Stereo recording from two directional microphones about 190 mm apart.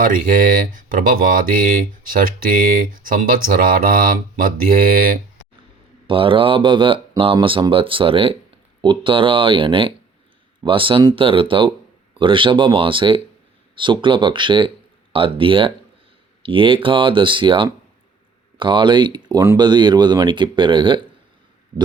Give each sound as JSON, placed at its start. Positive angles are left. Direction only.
{"t": 0.0, "sound": "speech", "side_deg": -45}
{"t": 6.1, "sound": "speech", "side_deg": -25}